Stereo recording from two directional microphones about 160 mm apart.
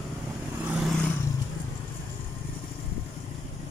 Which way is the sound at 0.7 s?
Centre (ahead or behind).